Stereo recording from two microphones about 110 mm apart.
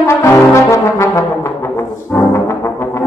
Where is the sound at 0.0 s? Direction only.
25° left (ahead or behind).